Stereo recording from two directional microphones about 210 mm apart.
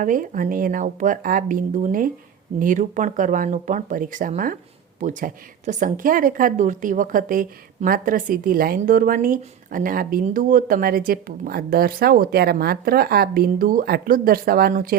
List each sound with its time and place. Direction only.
0.0 s a woman's voice: 40° right (ahead or behind)